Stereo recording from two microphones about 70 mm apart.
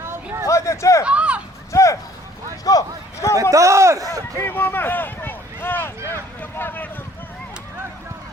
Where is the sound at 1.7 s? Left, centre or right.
Left.